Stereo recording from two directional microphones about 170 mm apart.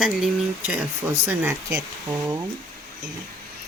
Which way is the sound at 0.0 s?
5° right (ahead or behind).